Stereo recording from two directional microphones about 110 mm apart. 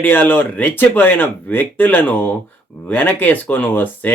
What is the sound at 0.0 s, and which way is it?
Speech, 15° left (ahead or behind).